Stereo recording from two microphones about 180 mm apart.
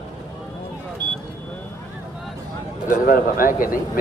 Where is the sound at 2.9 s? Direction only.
50° left (ahead or behind).